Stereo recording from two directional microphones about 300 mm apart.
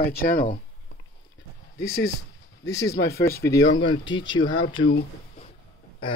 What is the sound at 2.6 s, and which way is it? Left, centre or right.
Speech, centre.